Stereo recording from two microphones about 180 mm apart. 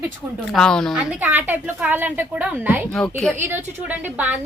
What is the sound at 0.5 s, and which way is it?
Speech, 5° left (ahead or behind).